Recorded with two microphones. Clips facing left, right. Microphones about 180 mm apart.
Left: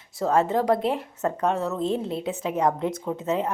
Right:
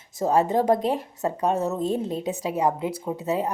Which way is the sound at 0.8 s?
40° right (ahead or behind).